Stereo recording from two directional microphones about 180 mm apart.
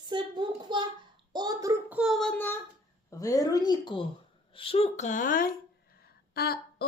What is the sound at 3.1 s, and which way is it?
Speech, 20° left (ahead or behind).